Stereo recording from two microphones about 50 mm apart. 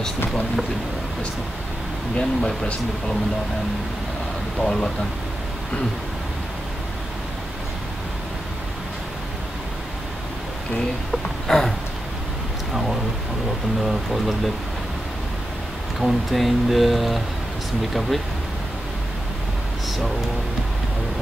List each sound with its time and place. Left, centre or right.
2.1 s speech: centre
4.6 s speech: centre
11.4 s a sound: centre
12.7 s a sound: centre
13.8 s speech: centre
16.0 s speech: centre